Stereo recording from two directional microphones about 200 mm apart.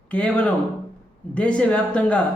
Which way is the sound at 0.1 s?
5° left (ahead or behind).